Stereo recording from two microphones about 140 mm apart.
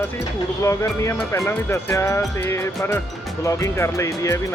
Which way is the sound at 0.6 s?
20° left (ahead or behind).